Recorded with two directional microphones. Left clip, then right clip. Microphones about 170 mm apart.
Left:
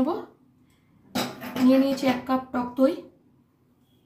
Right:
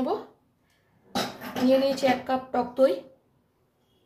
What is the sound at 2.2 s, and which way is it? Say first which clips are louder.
Speech: right 1 dB; 35° right (ahead or behind).